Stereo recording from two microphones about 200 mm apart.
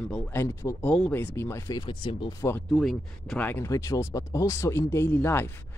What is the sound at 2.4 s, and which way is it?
Speech, 10° left (ahead or behind).